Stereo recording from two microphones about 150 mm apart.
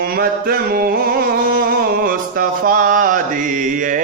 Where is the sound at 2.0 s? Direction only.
70° right (ahead or behind).